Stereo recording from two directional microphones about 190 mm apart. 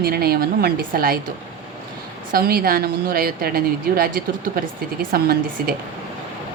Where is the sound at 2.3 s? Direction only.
50° right (ahead or behind).